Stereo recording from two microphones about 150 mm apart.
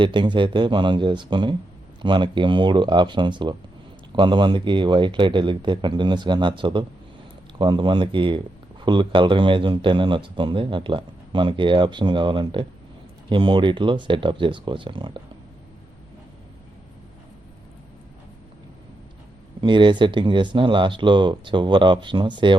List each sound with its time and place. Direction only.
0.0 s speech: 30° right (ahead or behind)
19.6 s speech: 30° right (ahead or behind)